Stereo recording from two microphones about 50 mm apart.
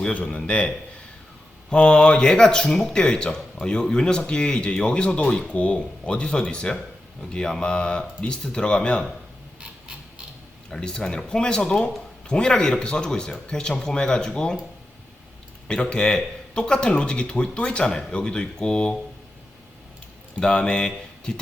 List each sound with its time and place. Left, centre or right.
0.0 s a man's voice: left
1.7 s speech: centre
5.5 s a man's voice: left
10.7 s speech: centre
15.6 s a man's voice: centre
20.4 s a man's voice: left